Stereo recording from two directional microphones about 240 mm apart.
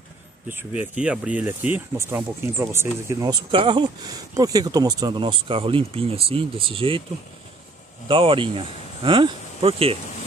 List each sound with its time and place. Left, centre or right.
0.5 s speech: centre
8.1 s speech: right